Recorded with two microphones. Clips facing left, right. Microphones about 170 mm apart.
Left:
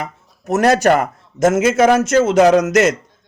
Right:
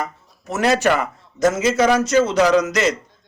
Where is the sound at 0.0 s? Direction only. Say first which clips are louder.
Even; 50° left (ahead or behind).